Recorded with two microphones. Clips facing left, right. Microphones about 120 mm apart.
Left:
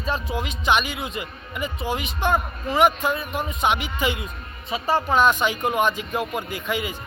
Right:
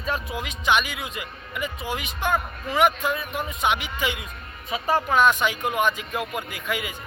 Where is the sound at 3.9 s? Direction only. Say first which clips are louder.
Left 3 dB; 40° left (ahead or behind).